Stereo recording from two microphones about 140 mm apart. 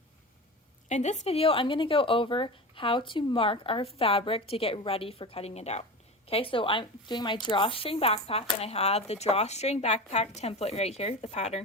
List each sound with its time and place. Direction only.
0.9 s a woman's voice: 55° left (ahead or behind)